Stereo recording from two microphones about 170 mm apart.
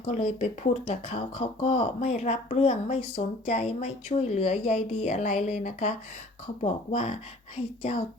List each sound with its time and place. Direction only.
0.0 s speech: 40° left (ahead or behind)